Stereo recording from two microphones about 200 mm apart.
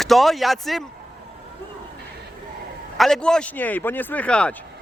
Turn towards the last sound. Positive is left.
turn(degrees=5)  # may be behind; listen again after turning